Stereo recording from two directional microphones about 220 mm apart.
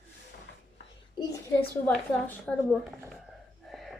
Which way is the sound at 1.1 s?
10° left (ahead or behind).